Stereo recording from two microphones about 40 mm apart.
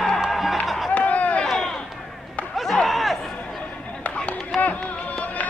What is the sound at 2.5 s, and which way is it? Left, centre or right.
Chop, centre.